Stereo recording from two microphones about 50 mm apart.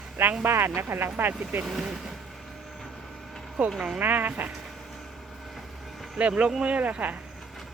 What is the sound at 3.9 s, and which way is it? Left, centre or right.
Speech, right.